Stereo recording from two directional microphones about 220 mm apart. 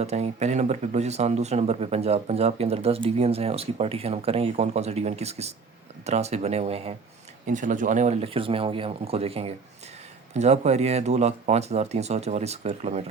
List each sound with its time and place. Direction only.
0.0 s speech: 30° right (ahead or behind)